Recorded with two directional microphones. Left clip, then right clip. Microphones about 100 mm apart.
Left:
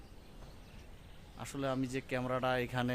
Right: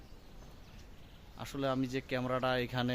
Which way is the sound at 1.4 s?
55° right (ahead or behind).